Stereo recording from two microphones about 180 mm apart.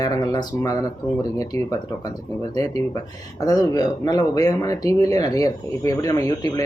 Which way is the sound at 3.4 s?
20° left (ahead or behind).